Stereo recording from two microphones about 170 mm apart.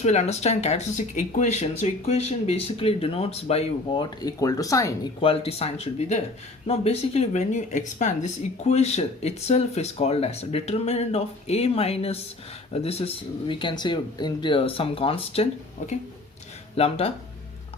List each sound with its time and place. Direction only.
0.0 s speech: 40° left (ahead or behind); by 5.1 s 20° left (ahead or behind)
5.2 s speech: 35° left (ahead or behind)
15.8 s speech: 45° left (ahead or behind)
16.7 s speech: 35° left (ahead or behind)